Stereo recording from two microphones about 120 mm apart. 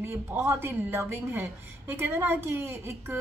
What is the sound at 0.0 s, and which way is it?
A woman's voice, 20° right (ahead or behind).